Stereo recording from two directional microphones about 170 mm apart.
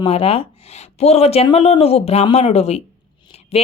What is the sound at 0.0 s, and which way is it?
A woman's voice, 35° left (ahead or behind).